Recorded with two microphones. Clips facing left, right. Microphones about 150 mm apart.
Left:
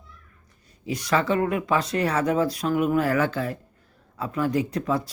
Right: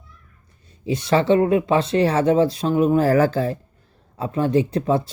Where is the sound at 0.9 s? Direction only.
25° right (ahead or behind).